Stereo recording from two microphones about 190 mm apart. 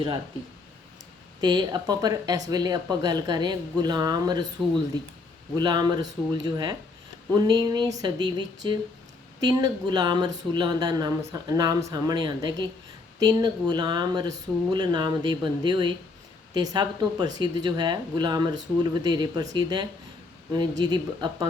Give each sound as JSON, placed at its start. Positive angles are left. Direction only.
{"t": 1.4, "sound": "speech", "side_deg": -20}
{"t": 5.5, "sound": "speech", "side_deg": -20}